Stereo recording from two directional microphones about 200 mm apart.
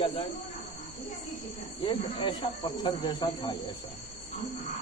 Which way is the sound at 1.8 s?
25° left (ahead or behind).